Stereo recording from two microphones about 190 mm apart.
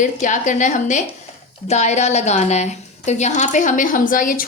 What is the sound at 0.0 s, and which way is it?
A woman's voice, 40° left (ahead or behind).